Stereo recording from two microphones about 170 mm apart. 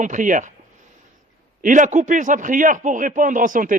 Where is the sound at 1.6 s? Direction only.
50° right (ahead or behind).